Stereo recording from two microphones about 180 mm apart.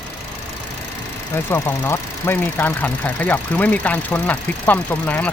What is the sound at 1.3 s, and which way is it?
Speech, 10° left (ahead or behind).